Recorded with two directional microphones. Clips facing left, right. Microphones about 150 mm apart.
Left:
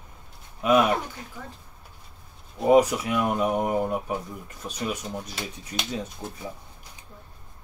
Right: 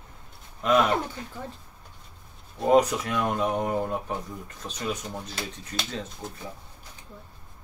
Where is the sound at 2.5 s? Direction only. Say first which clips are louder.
Left 2 dB; 10° left (ahead or behind).